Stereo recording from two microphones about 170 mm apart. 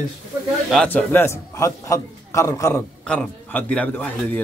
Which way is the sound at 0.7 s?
5° left (ahead or behind).